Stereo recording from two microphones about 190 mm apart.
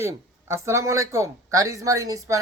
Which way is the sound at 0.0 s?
15° right (ahead or behind).